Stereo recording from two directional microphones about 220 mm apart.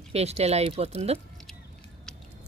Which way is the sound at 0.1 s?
30° right (ahead or behind).